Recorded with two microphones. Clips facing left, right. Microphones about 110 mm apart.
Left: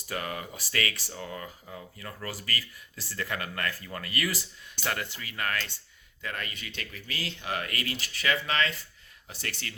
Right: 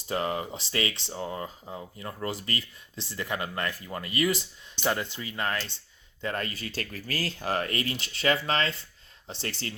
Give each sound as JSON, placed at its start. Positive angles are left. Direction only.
{"t": 0.1, "sound": "speech", "side_deg": -25}
{"t": 6.2, "sound": "speech", "side_deg": -35}